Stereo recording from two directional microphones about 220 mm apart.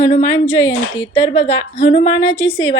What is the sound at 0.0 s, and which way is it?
Speech, 30° left (ahead or behind).